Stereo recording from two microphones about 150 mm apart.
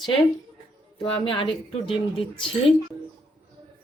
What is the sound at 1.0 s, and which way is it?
Speech, 35° left (ahead or behind).